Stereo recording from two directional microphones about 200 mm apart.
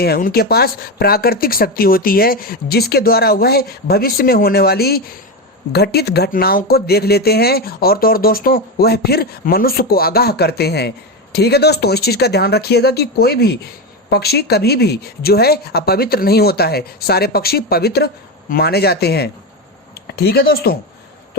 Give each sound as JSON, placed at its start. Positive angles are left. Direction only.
{"t": 0.0, "sound": "speech", "side_deg": 50}